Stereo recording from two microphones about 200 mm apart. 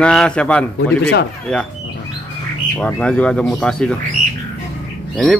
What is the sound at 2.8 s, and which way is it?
A man's voice, 5° left (ahead or behind).